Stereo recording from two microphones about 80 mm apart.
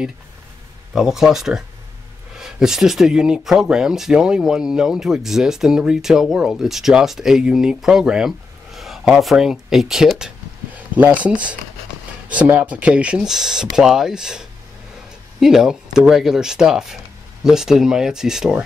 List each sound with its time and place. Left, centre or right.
0.9 s speech: centre
10.7 s speech: centre